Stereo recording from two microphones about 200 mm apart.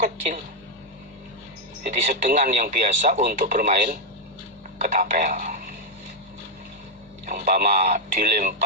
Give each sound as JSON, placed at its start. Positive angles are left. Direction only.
{"t": 1.9, "sound": "speech", "side_deg": -40}
{"t": 7.3, "sound": "speech", "side_deg": -45}